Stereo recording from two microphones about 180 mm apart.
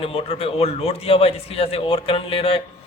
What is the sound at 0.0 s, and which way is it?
Speech, 35° left (ahead or behind).